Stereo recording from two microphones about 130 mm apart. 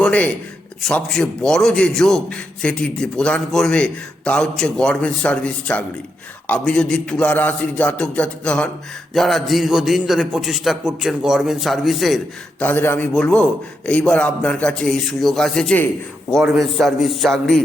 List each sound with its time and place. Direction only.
0.0 s a man's voice: 10° left (ahead or behind)
12.6 s a man's voice: 15° left (ahead or behind)